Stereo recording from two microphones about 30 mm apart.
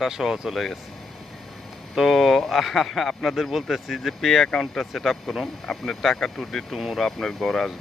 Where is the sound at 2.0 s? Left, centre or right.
Centre.